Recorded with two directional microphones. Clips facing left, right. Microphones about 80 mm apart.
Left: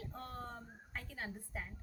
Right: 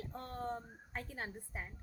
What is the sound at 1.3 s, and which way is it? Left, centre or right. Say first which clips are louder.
Speech: even; right.